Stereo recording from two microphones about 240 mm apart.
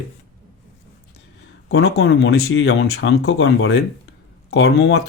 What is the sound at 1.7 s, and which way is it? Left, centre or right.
Speech, left.